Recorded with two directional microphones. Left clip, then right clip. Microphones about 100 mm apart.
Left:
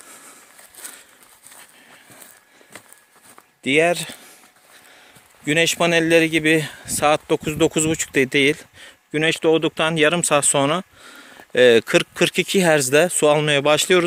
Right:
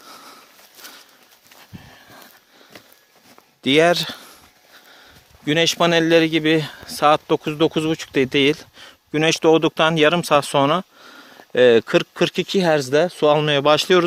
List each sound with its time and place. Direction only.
3.6 s speech: 45° right (ahead or behind)
5.5 s speech: 20° right (ahead or behind)
7.4 s speech: centre (ahead or behind); by 13.2 s 15° left (ahead or behind)
13.2 s speech: 5° right (ahead or behind)